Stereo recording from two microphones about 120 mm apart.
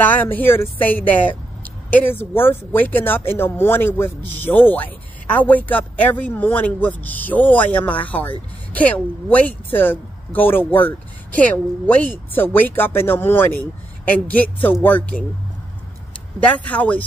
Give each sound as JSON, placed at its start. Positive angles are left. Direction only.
{"t": 0.0, "sound": "speech", "side_deg": 15}
{"t": 16.3, "sound": "speech", "side_deg": 10}